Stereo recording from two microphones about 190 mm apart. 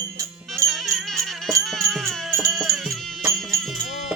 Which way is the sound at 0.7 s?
Centre (ahead or behind).